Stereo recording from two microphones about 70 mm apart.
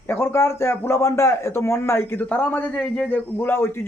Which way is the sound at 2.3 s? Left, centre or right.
Left.